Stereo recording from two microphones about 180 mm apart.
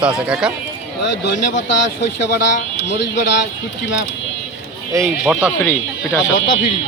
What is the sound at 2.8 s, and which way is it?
Speech, 65° left (ahead or behind).